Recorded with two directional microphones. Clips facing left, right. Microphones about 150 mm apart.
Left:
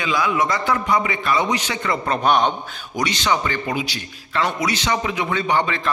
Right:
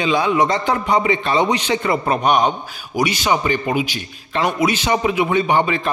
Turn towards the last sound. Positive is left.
turn(degrees=-15)  # may be behind; listen again after turning